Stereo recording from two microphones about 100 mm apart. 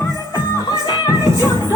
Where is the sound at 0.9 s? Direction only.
40° left (ahead or behind).